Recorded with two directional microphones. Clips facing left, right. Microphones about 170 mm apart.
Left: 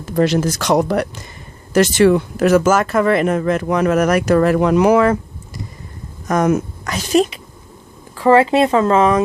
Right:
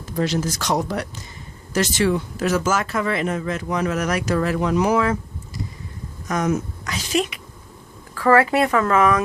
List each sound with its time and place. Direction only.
0.0 s speech: 65° left (ahead or behind)
6.2 s a woman's voice: 55° left (ahead or behind)
8.1 s speech: 20° left (ahead or behind)